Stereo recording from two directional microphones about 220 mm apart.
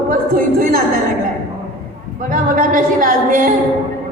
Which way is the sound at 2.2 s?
40° right (ahead or behind).